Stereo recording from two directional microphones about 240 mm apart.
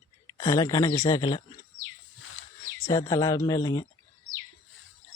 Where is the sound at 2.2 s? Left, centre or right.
Left.